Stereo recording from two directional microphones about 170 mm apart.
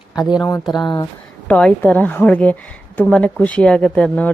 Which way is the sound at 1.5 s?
10° left (ahead or behind).